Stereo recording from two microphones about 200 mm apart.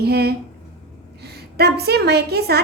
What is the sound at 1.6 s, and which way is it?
A woman's voice, 55° right (ahead or behind).